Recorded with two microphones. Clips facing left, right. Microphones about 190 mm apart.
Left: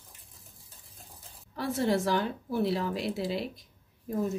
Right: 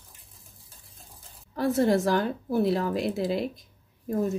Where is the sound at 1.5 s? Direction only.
45° right (ahead or behind).